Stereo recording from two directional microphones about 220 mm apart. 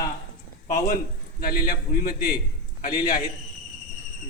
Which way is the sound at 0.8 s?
40° left (ahead or behind).